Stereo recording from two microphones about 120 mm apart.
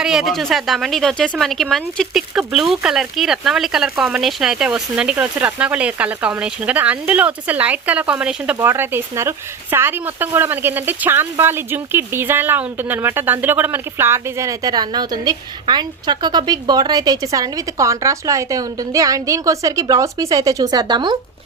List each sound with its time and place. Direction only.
0.0 s speech: 5° right (ahead or behind)
8.5 s speech: 20° right (ahead or behind); by 21.2 s 35° right (ahead or behind)